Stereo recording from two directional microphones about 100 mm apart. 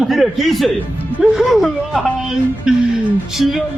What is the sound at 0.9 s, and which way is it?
Music, 15° right (ahead or behind).